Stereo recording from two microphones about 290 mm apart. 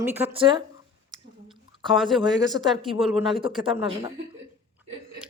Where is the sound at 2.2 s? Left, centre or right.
Centre.